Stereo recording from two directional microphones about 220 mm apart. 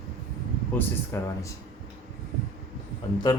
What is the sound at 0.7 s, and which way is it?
Speech, 10° left (ahead or behind).